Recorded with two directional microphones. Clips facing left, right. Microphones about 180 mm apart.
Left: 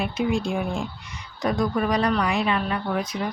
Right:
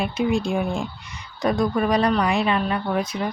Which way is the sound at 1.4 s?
30° right (ahead or behind).